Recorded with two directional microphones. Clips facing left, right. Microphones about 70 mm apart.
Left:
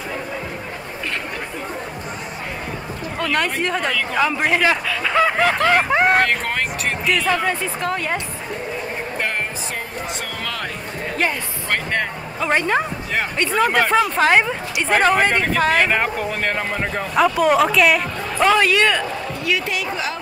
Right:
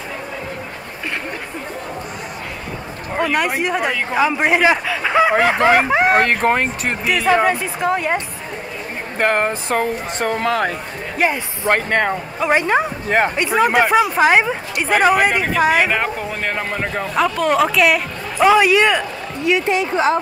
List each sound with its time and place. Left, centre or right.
3.2 s speech: centre
5.9 s speech: centre
6.4 s speech: right
9.2 s speech: right
10.4 s speech: right
11.7 s speech: right
12.4 s speech: centre; by 20.2 s right